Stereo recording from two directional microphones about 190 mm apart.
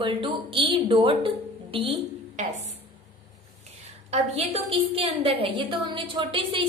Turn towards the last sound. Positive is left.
turn(degrees=-30)  # may be behind; listen again after turning